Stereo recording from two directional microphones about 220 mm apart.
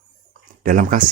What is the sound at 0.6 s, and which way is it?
Speech, 35° right (ahead or behind).